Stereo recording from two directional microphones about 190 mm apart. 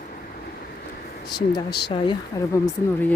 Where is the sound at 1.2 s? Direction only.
60° left (ahead or behind).